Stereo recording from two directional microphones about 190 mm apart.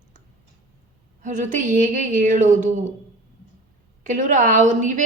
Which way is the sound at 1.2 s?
40° right (ahead or behind).